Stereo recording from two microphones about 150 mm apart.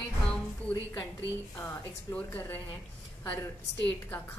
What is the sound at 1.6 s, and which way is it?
A woman's voice, 15° left (ahead or behind).